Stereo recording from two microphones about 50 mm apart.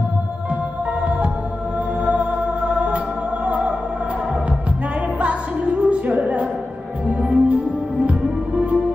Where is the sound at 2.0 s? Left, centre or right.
Right.